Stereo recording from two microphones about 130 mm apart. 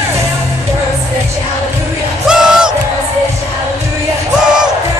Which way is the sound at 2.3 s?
5° right (ahead or behind).